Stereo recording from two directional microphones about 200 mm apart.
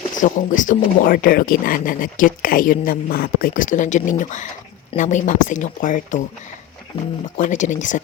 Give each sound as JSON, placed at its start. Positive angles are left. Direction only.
{"t": 0.2, "sound": "speech", "side_deg": 40}
{"t": 7.3, "sound": "speech", "side_deg": 40}